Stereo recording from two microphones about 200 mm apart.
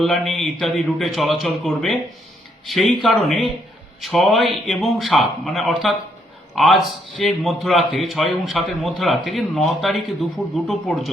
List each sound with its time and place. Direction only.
0.0 s a man's voice: centre (ahead or behind)